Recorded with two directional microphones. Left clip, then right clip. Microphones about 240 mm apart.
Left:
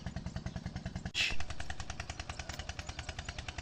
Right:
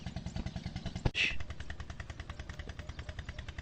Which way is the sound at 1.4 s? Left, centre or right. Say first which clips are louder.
Left 4 dB; left.